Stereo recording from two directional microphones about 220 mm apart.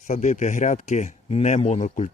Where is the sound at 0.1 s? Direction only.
35° left (ahead or behind).